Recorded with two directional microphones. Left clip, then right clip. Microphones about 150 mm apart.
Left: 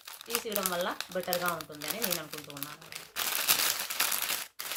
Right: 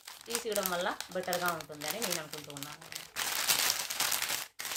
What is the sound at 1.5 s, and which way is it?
Speech, 15° right (ahead or behind).